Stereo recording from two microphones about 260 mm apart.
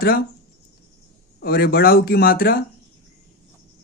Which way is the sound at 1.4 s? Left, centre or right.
Left.